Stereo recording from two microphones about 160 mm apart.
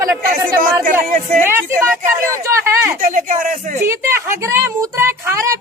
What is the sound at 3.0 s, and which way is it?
Speech, 55° right (ahead or behind).